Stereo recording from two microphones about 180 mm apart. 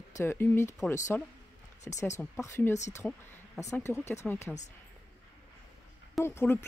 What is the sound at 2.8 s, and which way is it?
Speech, 40° left (ahead or behind).